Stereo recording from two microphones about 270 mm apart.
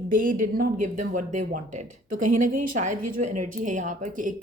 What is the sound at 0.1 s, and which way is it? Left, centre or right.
A woman's voice, right.